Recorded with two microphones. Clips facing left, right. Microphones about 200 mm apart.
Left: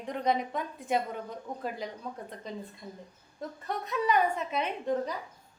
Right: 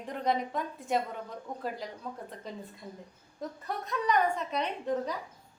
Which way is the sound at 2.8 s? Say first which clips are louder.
Even; 10° right (ahead or behind).